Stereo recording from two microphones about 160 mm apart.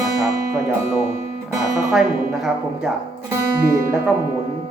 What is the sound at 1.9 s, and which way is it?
Speech, 5° right (ahead or behind).